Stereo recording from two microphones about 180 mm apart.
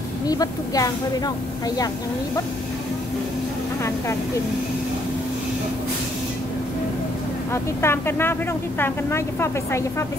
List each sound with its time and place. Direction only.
0.3 s speech: 20° left (ahead or behind)
7.5 s speech: 15° left (ahead or behind)